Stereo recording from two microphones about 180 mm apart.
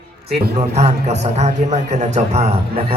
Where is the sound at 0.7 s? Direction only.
35° right (ahead or behind).